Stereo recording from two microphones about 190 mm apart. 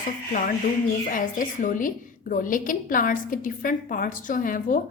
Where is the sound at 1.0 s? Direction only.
45° left (ahead or behind).